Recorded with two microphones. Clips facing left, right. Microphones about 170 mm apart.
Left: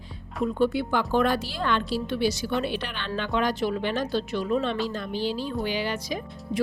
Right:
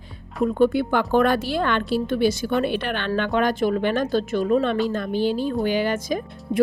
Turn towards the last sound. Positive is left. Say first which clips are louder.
# right 5 dB
turn(degrees=-50)  # may be behind; listen again after turning